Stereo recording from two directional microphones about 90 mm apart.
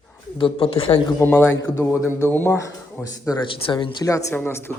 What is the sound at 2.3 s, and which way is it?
Speech, 20° left (ahead or behind).